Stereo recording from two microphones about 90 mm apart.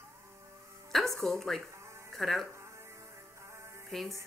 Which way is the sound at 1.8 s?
30° right (ahead or behind).